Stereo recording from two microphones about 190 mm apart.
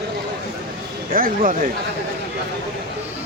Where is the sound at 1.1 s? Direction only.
50° right (ahead or behind).